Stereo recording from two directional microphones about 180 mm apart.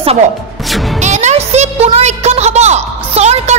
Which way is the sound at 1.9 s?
35° right (ahead or behind).